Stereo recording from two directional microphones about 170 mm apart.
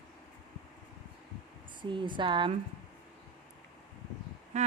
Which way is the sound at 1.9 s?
30° right (ahead or behind).